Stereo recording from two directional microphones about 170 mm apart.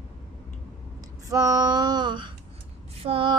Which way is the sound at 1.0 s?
20° right (ahead or behind).